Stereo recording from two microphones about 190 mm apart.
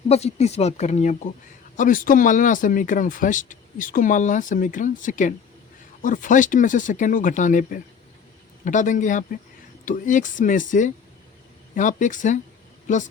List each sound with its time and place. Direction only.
0.1 s speech: 35° left (ahead or behind)